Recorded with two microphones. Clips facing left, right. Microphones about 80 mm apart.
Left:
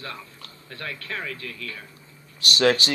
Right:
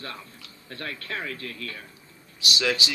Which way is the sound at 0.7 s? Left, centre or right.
Right.